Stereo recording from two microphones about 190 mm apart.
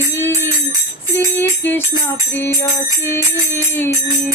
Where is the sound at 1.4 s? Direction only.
10° left (ahead or behind).